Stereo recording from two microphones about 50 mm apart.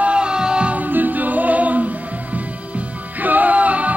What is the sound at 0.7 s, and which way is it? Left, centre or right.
Music, right.